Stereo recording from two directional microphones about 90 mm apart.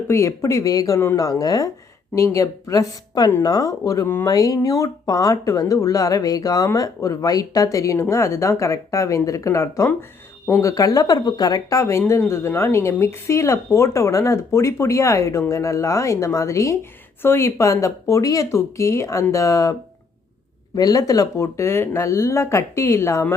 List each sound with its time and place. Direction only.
0.1 s a woman's voice: 35° left (ahead or behind)
4.0 s speech: 25° left (ahead or behind)
4.3 s a woman's voice: 40° left (ahead or behind)
11.8 s a woman's voice: 30° left (ahead or behind)
20.7 s a woman's voice: 45° left (ahead or behind)